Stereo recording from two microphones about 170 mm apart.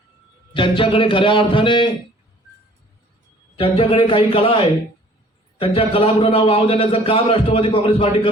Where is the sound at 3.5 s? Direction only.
30° left (ahead or behind).